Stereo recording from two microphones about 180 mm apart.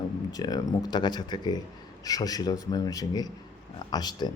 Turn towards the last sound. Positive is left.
turn(degrees=25)  # may be behind; listen again after turning